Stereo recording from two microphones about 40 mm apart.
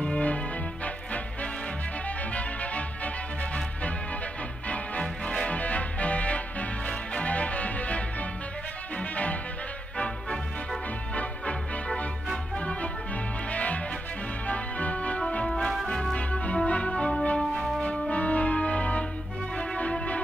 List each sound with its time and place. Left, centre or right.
0.0 s music: left
5.0 s music: left
16.3 s music: left